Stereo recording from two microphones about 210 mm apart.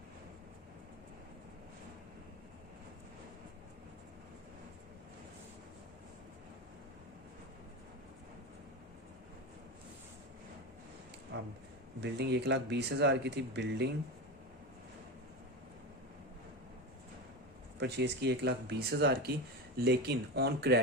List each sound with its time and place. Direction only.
11.3 s a sound: 55° right (ahead or behind)
11.9 s speech: 55° right (ahead or behind)
17.7 s speech: 55° right (ahead or behind)